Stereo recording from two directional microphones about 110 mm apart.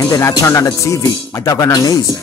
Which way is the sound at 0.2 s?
30° left (ahead or behind).